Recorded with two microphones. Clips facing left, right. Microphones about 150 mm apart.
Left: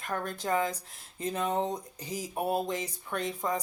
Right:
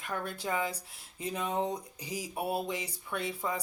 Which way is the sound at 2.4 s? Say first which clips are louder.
Left 4 dB; 40° left (ahead or behind).